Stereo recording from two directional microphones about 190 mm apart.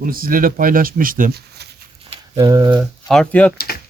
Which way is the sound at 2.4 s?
15° right (ahead or behind).